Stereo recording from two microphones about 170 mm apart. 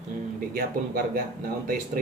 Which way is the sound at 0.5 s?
60° right (ahead or behind).